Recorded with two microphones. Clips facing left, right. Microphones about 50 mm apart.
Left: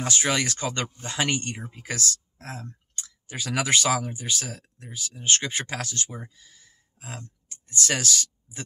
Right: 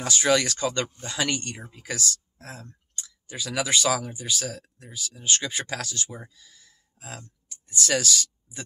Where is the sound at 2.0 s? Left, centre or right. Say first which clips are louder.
Even; left.